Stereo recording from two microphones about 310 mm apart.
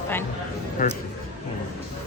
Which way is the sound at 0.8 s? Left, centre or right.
Left.